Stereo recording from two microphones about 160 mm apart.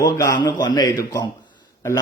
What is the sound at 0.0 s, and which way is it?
Speech, 20° left (ahead or behind).